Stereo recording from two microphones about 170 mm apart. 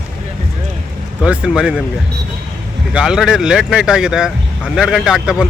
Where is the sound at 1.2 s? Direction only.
5° right (ahead or behind).